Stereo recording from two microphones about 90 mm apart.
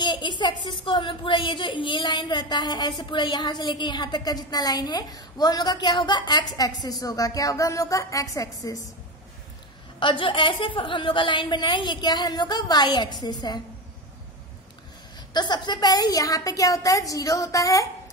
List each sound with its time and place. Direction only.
0.0 s a woman's voice: 60° left (ahead or behind); by 8.8 s 40° left (ahead or behind)
9.9 s a woman's voice: 70° left (ahead or behind); by 13.6 s 50° left (ahead or behind)
15.1 s a woman's voice: 50° left (ahead or behind)